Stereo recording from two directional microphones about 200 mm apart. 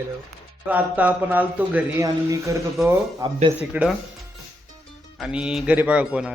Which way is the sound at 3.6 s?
5° right (ahead or behind).